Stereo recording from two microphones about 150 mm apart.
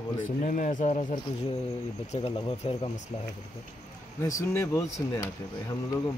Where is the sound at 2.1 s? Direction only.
45° left (ahead or behind).